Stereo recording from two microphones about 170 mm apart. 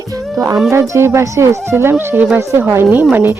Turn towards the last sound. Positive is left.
turn(degrees=-10)  # may be behind; listen again after turning